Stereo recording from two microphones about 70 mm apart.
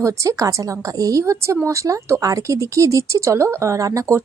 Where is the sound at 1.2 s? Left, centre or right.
Right.